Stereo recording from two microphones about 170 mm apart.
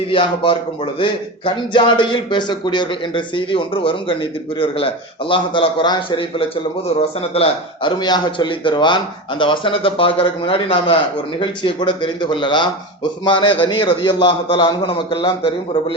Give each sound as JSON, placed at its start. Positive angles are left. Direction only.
{"t": 0.1, "sound": "speech", "side_deg": 30}